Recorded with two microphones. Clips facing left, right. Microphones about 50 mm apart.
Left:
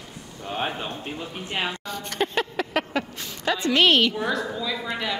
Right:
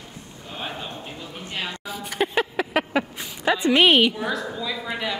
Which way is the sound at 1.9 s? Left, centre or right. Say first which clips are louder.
Right 1 dB; centre.